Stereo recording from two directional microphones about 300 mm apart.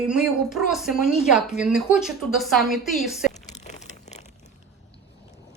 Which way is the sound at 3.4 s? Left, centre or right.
Left.